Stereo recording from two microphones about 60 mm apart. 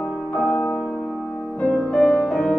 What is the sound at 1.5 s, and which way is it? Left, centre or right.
Music, left.